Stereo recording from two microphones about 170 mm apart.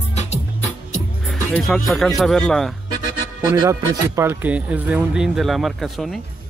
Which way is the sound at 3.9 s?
15° right (ahead or behind).